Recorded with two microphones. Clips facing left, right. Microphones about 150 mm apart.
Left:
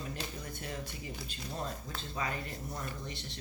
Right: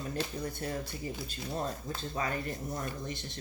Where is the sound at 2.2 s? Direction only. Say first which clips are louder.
Right 3 dB; 40° right (ahead or behind).